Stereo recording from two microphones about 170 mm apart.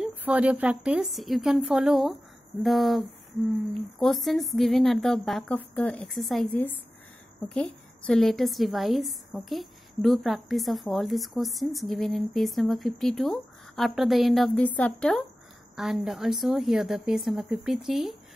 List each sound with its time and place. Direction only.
0.0 s a woman's voice: 10° right (ahead or behind)
4.0 s a woman's voice: centre (ahead or behind)
8.1 s a woman's voice: centre (ahead or behind)